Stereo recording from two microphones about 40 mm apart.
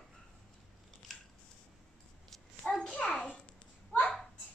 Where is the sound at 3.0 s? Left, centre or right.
Left.